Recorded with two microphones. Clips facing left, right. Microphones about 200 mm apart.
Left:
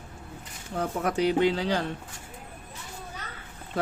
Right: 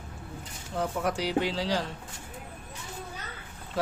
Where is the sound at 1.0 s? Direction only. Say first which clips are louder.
Left 6 dB; 60° left (ahead or behind).